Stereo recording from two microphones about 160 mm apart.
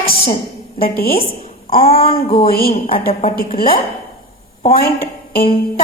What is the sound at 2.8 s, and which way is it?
Speech, 35° left (ahead or behind).